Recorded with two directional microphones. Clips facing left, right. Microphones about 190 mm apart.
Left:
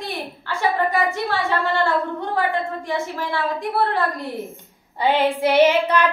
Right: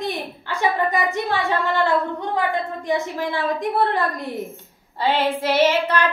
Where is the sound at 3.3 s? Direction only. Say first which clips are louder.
Right 1 dB; 20° right (ahead or behind).